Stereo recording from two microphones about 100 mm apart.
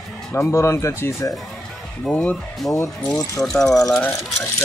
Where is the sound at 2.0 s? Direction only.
15° left (ahead or behind).